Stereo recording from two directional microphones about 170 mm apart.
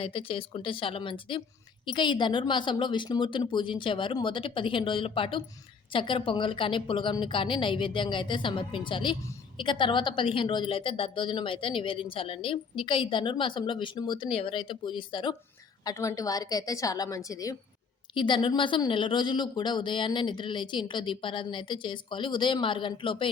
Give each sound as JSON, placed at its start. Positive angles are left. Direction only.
{"t": 0.0, "sound": "a woman's voice", "side_deg": 30}